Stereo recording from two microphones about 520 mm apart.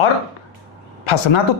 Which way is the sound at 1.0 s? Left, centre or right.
Left.